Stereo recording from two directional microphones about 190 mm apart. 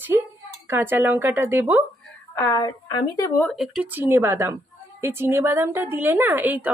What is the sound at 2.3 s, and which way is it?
Speech, 20° left (ahead or behind).